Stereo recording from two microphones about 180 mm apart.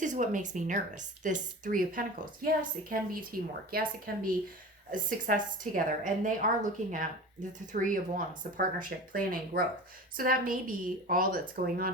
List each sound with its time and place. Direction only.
0.0 s a woman's voice: 45° right (ahead or behind)